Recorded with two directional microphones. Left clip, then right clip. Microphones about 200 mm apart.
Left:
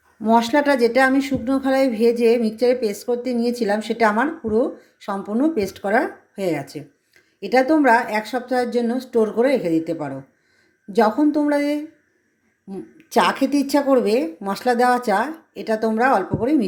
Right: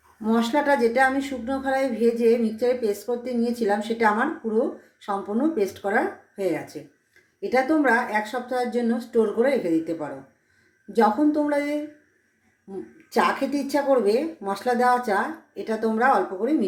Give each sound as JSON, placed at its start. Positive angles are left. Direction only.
{"t": 0.2, "sound": "speech", "side_deg": 35}
{"t": 13.1, "sound": "speech", "side_deg": 45}